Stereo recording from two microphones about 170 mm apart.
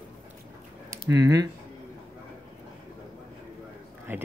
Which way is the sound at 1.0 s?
20° right (ahead or behind).